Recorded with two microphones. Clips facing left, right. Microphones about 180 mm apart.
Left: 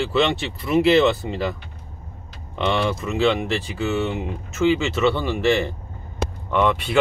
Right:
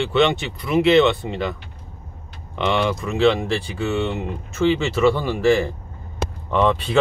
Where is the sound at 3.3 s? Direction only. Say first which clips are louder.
Right 1 dB; 30° right (ahead or behind).